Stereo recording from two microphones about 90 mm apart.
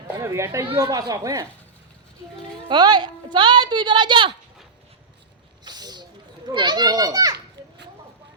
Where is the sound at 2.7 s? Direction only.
55° right (ahead or behind).